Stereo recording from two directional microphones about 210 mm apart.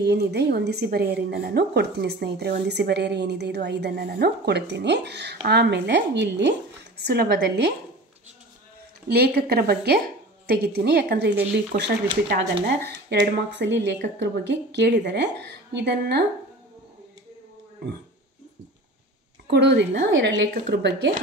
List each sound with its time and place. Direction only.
0.0 s a woman's voice: 50° right (ahead or behind)
9.1 s a woman's voice: 50° right (ahead or behind)
19.5 s a woman's voice: 55° right (ahead or behind)